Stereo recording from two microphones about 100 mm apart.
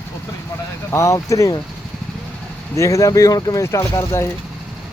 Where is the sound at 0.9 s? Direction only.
30° left (ahead or behind).